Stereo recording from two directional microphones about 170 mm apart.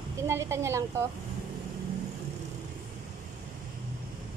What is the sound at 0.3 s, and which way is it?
Speech, 15° right (ahead or behind).